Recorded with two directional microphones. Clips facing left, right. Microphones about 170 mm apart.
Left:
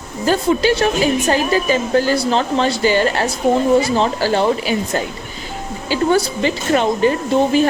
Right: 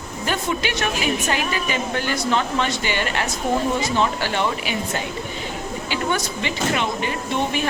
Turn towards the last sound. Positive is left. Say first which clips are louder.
# left 9 dB
turn(degrees=35)  # may be behind; listen again after turning